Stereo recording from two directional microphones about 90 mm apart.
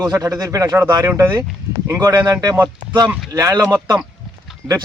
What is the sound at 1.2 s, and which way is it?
Speech, 25° right (ahead or behind).